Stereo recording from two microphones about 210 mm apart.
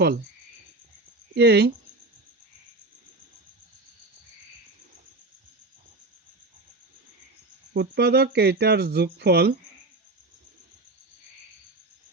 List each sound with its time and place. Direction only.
1.4 s speech: 50° right (ahead or behind)
7.7 s speech: 50° right (ahead or behind)